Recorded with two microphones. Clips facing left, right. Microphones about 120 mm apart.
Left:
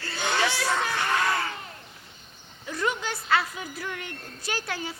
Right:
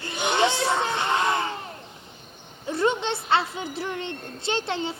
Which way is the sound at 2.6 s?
30° right (ahead or behind).